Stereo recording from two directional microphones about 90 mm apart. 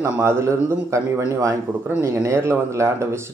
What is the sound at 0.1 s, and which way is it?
Speech, 30° right (ahead or behind).